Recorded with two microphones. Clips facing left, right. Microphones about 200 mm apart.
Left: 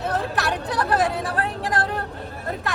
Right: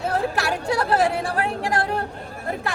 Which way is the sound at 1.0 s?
30° right (ahead or behind).